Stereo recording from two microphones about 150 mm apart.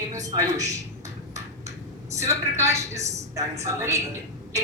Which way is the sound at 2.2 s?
20° right (ahead or behind).